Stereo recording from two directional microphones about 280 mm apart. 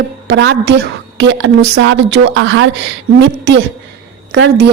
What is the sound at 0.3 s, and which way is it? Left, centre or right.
A woman's voice, right.